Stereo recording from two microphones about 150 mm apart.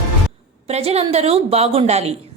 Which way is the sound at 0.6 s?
45° right (ahead or behind).